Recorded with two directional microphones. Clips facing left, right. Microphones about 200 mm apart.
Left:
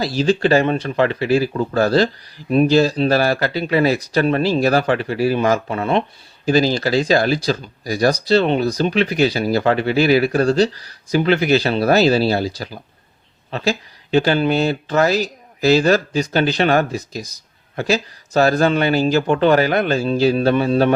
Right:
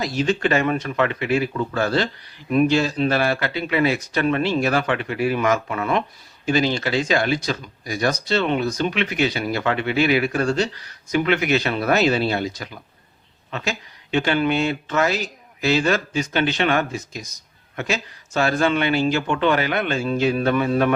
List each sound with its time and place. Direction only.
0.0 s speech: 35° left (ahead or behind)